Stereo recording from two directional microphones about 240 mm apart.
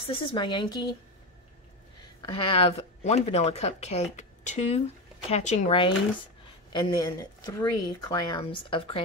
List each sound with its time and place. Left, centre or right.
0.0 s speech: left
2.2 s speech: left